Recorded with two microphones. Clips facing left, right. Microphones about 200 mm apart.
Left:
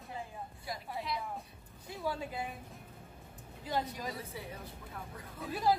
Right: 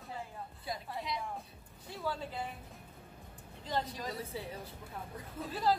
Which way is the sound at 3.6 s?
10° left (ahead or behind).